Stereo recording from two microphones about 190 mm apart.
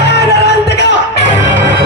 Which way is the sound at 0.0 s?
60° left (ahead or behind).